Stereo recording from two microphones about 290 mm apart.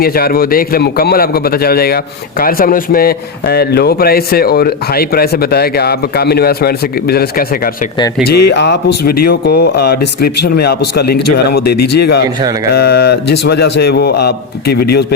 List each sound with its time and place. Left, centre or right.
0.0 s speech: left